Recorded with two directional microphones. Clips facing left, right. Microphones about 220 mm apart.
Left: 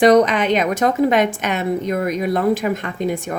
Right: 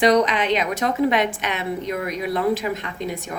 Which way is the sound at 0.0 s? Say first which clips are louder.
Left 5 dB; 45° left (ahead or behind).